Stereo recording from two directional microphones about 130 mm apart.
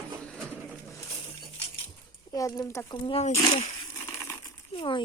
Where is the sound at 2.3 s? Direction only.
25° left (ahead or behind).